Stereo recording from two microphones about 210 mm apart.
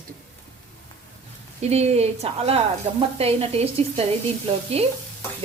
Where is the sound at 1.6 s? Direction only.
30° right (ahead or behind).